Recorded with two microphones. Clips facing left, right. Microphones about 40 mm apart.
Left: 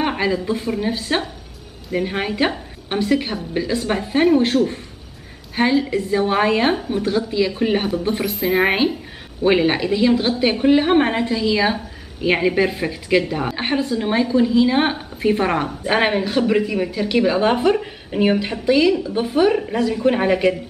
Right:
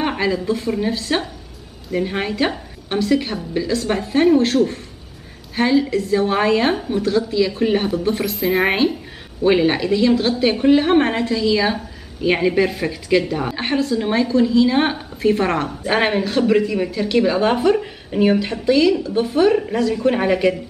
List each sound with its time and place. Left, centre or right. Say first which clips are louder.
0.0 s a woman's voice: even; centre
2.4 s a sound: even; centre
3.0 s a woman's voice: right 1 dB; centre
7.0 s a woman's voice: right 2 dB; centre